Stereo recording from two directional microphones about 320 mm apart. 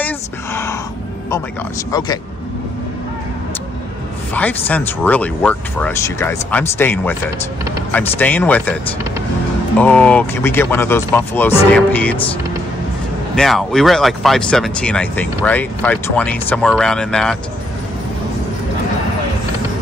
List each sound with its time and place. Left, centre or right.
0.0 s a sound: centre
1.9 s speech: centre
4.3 s speech: centre
9.8 s speech: centre
13.4 s speech: centre